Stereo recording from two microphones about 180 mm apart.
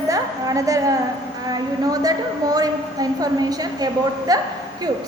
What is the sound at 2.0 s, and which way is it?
A woman's voice, 20° right (ahead or behind).